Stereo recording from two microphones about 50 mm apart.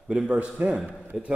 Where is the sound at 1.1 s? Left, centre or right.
Centre.